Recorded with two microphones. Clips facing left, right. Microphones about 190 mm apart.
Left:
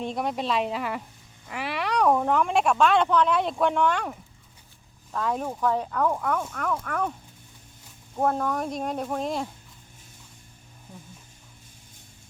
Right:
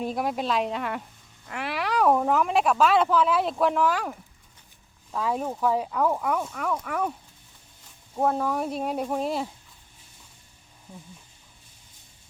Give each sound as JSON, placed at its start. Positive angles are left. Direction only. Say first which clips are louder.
{"t": 0.0, "sound": "speech", "louder": "right 1 dB", "side_deg": -5}
{"t": 8.1, "sound": "speech", "louder": "even", "side_deg": -5}